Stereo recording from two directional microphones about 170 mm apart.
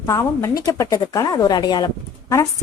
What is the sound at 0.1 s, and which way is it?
A woman's voice, 15° left (ahead or behind).